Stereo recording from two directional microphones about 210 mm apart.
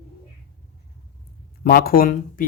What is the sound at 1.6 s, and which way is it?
Speech, 45° left (ahead or behind).